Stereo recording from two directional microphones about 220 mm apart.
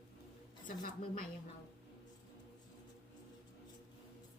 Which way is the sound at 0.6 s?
40° left (ahead or behind).